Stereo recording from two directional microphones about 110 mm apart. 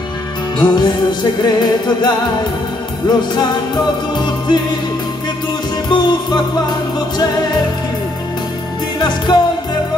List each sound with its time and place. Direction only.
0.6 s music: 40° left (ahead or behind)
5.9 s music: 40° left (ahead or behind)
9.0 s music: 40° left (ahead or behind)